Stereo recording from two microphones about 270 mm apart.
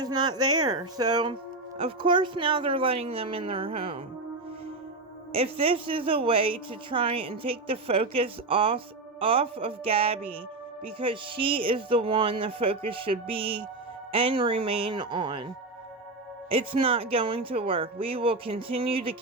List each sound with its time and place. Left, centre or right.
0.0 s a woman's voice: centre
5.3 s a woman's voice: right